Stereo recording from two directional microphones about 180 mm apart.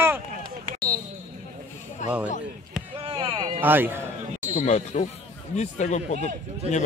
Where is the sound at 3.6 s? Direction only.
10° right (ahead or behind).